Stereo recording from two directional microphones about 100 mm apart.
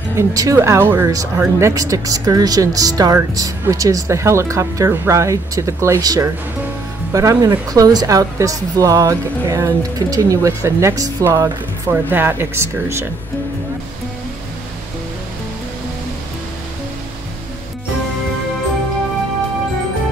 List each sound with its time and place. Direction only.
0.2 s a woman's voice: 35° right (ahead or behind)
11.9 s speech: 20° right (ahead or behind)